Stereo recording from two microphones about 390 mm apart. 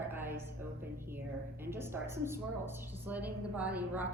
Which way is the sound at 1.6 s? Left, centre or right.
Centre.